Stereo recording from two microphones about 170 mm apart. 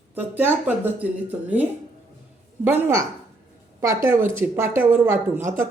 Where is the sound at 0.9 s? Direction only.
10° right (ahead or behind).